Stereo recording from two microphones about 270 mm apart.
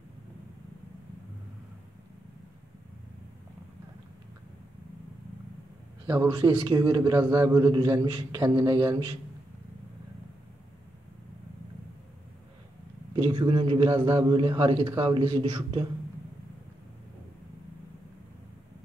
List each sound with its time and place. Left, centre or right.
6.0 s a man's voice: centre
13.1 s a man's voice: centre